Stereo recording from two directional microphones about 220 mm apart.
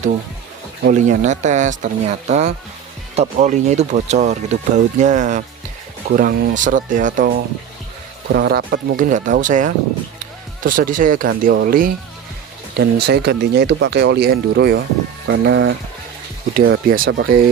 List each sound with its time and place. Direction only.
0.9 s speech: 35° right (ahead or behind)
8.3 s speech: 50° right (ahead or behind)
16.6 s speech: 40° right (ahead or behind)
17.1 s speech: 55° right (ahead or behind)